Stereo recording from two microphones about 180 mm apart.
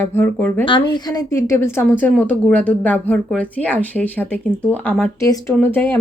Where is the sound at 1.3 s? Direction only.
15° left (ahead or behind).